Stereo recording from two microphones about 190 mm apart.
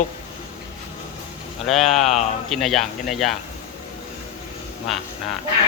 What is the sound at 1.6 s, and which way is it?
Speech, centre (ahead or behind).